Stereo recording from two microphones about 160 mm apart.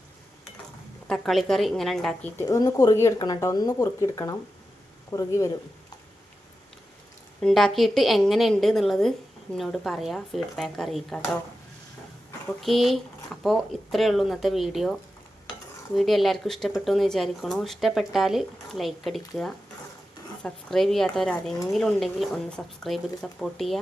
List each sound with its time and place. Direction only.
1.0 s speech: centre (ahead or behind)
2.4 s speech: 20° left (ahead or behind)
7.4 s speech: centre (ahead or behind)
12.5 s speech: centre (ahead or behind)
16.0 s speech: centre (ahead or behind)